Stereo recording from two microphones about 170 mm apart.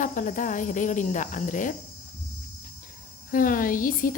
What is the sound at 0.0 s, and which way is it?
A woman's voice, 50° left (ahead or behind).